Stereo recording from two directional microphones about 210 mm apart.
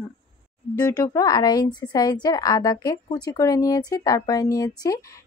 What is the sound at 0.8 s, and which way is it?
A woman's voice, 15° left (ahead or behind).